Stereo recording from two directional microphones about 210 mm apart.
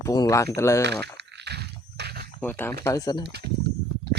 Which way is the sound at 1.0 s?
55° right (ahead or behind).